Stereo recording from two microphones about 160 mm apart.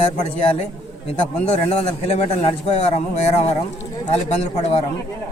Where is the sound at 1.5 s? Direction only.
40° left (ahead or behind).